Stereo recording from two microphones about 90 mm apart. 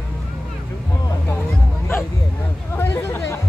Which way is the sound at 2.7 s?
30° left (ahead or behind).